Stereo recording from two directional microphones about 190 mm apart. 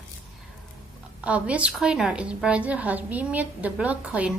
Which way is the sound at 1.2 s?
5° right (ahead or behind).